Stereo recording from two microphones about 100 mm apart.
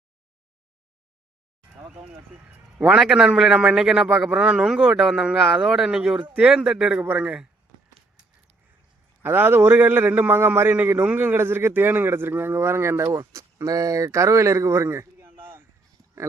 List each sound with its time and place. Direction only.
2.7 s a man's voice: 10° right (ahead or behind)
9.2 s a man's voice: 20° right (ahead or behind)